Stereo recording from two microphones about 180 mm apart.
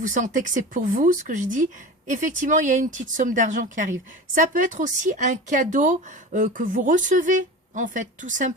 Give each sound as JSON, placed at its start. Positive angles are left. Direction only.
{"t": 0.0, "sound": "a woman's voice", "side_deg": -45}